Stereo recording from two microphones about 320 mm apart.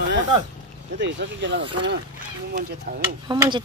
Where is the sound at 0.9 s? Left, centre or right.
Right.